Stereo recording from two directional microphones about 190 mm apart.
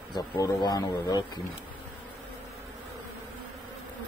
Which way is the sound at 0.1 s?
20° left (ahead or behind).